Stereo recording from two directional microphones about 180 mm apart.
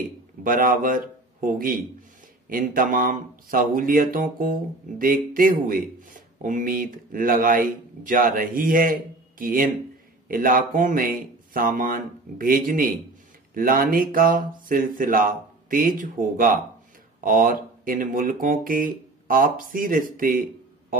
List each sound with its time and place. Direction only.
0.4 s speech: 50° right (ahead or behind)
2.5 s speech: 50° right (ahead or behind)